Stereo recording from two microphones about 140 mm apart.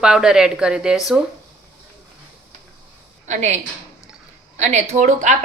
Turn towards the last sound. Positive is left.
turn(degrees=-60)  # may be behind; listen again after turning